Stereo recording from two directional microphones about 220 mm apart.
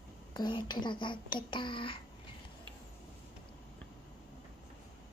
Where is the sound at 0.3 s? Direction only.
20° left (ahead or behind).